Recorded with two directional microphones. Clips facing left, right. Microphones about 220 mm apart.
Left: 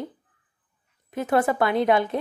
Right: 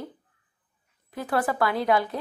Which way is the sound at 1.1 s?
20° left (ahead or behind).